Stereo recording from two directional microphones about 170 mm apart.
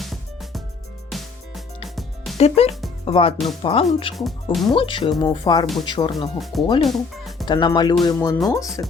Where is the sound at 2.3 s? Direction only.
40° left (ahead or behind).